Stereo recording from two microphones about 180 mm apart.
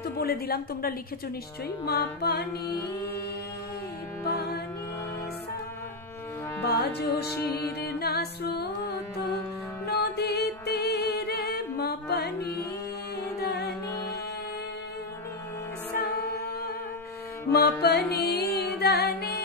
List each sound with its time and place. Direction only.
0.0 s a woman's voice: 60° left (ahead or behind)
1.9 s music: 60° left (ahead or behind)
4.2 s music: 60° left (ahead or behind)
6.6 s music: 60° left (ahead or behind)
9.8 s music: 65° left (ahead or behind)
16.0 s music: 60° left (ahead or behind)